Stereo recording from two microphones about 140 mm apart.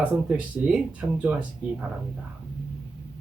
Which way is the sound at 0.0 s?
10° right (ahead or behind).